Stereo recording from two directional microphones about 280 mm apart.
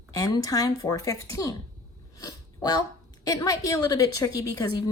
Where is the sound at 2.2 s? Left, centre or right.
Centre.